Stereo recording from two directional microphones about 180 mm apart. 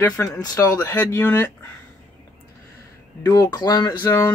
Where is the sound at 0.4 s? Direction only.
20° left (ahead or behind).